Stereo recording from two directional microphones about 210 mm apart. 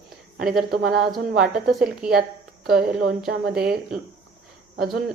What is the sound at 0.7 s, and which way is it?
Speech, 50° right (ahead or behind).